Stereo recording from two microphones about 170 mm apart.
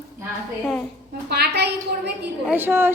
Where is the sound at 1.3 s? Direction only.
75° right (ahead or behind).